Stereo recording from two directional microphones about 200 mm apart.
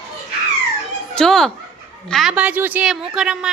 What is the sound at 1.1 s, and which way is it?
A woman's voice, 5° left (ahead or behind).